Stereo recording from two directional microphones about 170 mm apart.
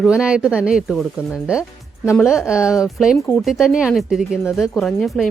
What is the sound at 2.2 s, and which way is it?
Speech, 5° right (ahead or behind).